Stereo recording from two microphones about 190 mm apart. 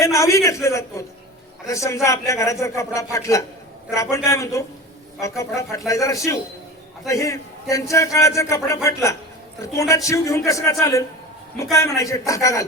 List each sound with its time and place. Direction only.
0.0 s a man's voice: 15° left (ahead or behind)